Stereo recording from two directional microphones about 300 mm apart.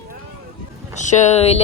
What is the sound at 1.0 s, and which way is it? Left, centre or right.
Speech, left.